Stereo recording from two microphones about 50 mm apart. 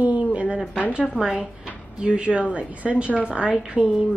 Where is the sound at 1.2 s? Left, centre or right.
Centre.